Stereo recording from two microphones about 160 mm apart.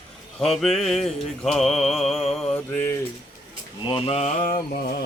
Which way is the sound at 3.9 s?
35° left (ahead or behind).